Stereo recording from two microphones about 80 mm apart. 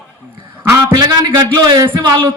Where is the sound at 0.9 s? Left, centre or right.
Right.